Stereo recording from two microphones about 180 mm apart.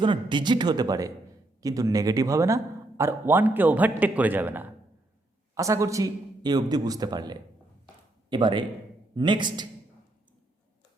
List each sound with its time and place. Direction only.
0.0 s a man's voice: 25° right (ahead or behind)